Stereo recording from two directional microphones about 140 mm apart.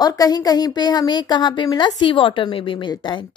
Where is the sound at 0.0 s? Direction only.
30° left (ahead or behind).